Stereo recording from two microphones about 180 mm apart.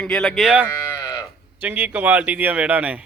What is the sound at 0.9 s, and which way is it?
Sheep, 20° left (ahead or behind).